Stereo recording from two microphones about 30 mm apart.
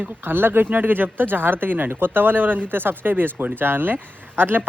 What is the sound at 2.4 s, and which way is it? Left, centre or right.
Speech, right.